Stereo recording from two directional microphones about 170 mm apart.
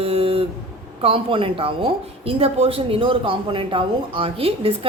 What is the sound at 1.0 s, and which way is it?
A woman's voice, 30° right (ahead or behind).